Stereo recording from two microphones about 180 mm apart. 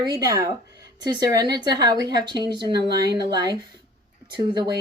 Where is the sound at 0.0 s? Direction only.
20° right (ahead or behind).